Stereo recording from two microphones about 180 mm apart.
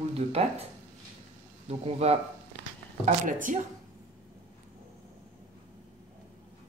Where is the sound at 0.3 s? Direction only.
35° right (ahead or behind).